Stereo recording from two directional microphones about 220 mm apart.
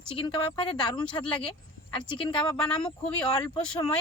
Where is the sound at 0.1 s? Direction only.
25° left (ahead or behind).